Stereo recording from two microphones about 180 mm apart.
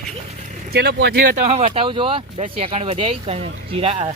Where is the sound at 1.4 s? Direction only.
30° right (ahead or behind).